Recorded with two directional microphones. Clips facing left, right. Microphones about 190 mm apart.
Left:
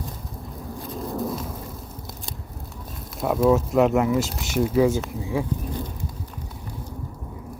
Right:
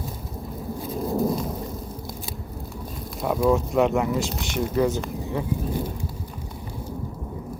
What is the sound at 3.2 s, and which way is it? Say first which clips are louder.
Speech: left 2 dB; centre (ahead or behind).